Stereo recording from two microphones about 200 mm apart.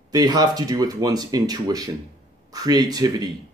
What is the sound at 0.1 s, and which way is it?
Speech, 20° right (ahead or behind).